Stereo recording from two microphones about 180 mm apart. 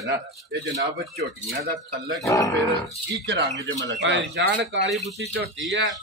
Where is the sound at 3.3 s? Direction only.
80° right.